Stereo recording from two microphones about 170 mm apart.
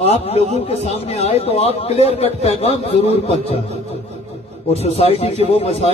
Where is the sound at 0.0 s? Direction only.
35° left (ahead or behind).